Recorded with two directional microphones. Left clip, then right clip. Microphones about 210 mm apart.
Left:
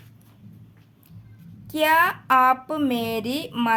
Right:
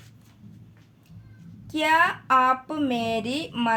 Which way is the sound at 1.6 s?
25° left (ahead or behind).